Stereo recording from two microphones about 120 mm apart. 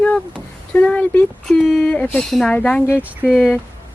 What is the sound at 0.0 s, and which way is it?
Speech, 10° left (ahead or behind).